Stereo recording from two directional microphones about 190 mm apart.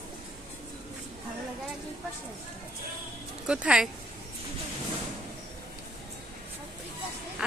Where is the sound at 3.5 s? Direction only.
5° right (ahead or behind).